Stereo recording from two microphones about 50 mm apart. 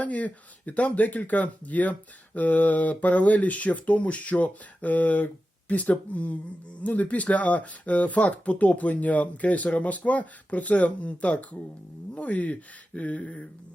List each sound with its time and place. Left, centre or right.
0.0 s speech: left